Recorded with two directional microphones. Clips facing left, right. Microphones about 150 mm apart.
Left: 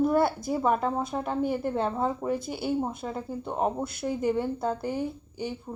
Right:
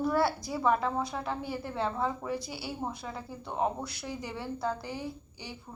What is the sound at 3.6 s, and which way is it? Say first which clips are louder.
A woman's voice: left 3 dB; 45° left (ahead or behind).